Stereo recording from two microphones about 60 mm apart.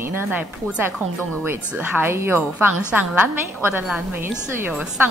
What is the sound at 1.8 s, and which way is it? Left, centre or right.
Speech, right.